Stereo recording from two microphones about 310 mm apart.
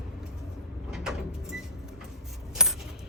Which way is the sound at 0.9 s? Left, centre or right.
Centre.